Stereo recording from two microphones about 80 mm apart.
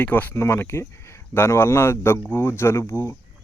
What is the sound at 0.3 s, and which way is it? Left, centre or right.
Speech, left.